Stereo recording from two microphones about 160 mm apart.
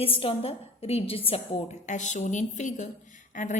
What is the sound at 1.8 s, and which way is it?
A woman's voice, 50° left (ahead or behind).